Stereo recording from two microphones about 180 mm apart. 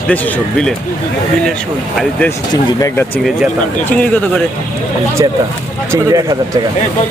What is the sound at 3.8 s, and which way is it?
Speech, 10° left (ahead or behind).